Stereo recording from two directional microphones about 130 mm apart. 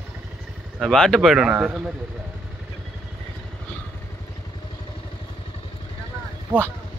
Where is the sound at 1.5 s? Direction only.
15° right (ahead or behind).